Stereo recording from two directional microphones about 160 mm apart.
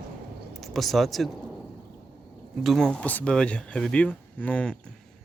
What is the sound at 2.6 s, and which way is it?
A man's voice, centre (ahead or behind).